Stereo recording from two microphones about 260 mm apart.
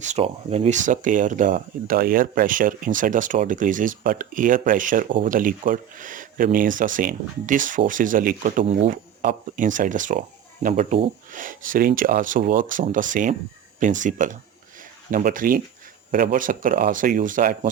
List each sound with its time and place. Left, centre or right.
0.0 s speech: right